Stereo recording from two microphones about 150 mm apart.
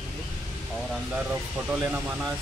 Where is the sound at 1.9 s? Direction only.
10° right (ahead or behind).